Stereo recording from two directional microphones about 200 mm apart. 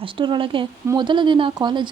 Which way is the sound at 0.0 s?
25° right (ahead or behind).